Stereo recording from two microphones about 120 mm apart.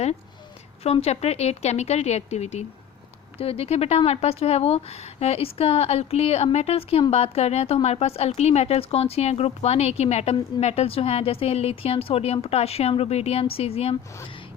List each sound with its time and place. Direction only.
0.8 s speech: 60° left (ahead or behind)
3.3 s speech: 55° left (ahead or behind)